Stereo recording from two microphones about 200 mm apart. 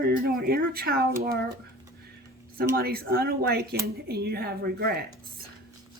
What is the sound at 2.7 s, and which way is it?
A woman's voice, 50° right (ahead or behind).